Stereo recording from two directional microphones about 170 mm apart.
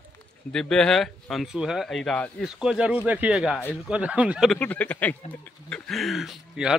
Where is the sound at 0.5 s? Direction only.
5° left (ahead or behind).